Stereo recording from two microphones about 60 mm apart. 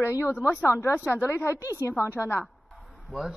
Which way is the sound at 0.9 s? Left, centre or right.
Left.